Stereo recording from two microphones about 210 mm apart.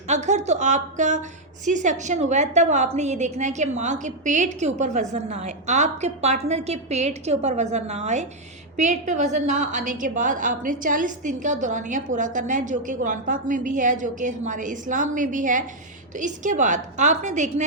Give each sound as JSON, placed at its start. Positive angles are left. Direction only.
{"t": 0.1, "sound": "a woman's voice", "side_deg": -35}